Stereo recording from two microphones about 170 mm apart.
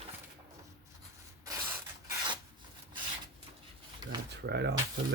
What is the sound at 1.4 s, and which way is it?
Rub, 20° right (ahead or behind).